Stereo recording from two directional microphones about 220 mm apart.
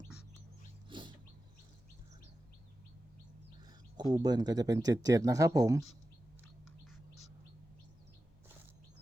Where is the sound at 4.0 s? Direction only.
20° right (ahead or behind).